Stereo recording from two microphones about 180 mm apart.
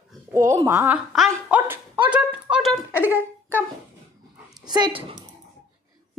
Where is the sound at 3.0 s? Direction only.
15° left (ahead or behind).